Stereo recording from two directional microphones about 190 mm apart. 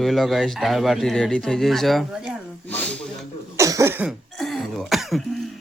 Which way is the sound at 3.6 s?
15° right (ahead or behind).